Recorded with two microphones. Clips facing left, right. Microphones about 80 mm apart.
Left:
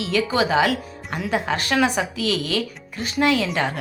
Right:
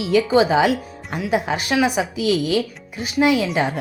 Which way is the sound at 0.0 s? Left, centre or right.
Centre.